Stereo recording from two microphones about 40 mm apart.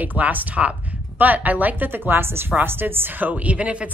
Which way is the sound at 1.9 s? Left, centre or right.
Right.